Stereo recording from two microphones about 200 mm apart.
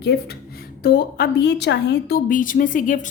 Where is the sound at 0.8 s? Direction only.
50° left (ahead or behind).